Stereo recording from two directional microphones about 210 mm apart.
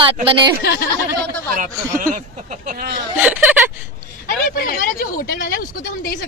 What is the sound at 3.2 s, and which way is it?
Speech, 5° right (ahead or behind).